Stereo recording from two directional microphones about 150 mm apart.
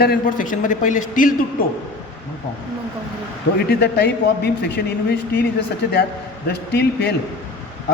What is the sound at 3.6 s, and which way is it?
A man's voice, 90° left.